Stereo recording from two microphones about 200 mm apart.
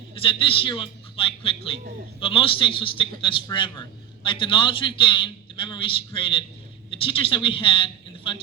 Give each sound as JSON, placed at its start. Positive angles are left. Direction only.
{"t": 0.1, "sound": "a man's voice", "side_deg": 25}